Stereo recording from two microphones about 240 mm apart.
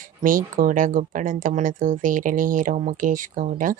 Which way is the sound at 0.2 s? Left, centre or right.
Right.